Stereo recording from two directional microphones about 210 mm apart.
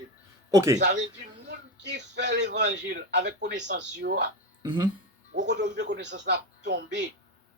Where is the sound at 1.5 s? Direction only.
55° right (ahead or behind).